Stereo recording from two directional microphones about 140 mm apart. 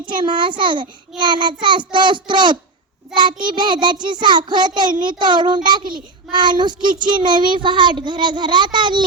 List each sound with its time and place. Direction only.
0.1 s a child's voice: 35° right (ahead or behind)